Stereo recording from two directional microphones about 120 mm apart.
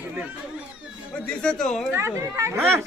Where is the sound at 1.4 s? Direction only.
5° left (ahead or behind).